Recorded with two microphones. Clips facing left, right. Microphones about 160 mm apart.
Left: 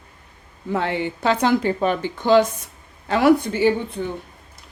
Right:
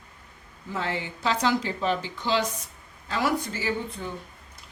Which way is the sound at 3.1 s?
65° left (ahead or behind).